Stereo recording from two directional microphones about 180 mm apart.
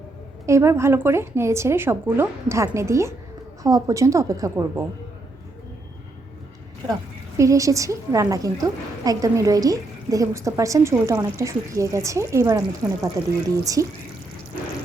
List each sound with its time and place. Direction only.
0.4 s a woman's voice: 15° right (ahead or behind)
7.3 s a woman's voice: 15° right (ahead or behind)